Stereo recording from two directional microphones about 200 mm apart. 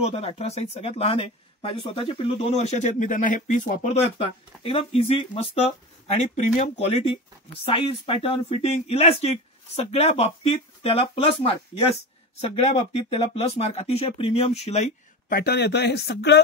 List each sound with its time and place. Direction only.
0.0 s speech: 30° left (ahead or behind)
15.2 s speech: 50° left (ahead or behind)